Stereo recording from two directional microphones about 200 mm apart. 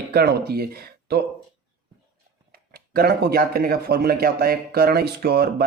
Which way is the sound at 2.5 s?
50° right (ahead or behind).